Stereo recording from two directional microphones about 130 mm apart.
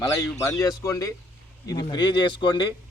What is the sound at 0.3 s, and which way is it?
Speech, 25° left (ahead or behind).